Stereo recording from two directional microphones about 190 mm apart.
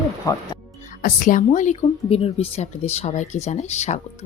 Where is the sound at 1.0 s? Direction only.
45° left (ahead or behind).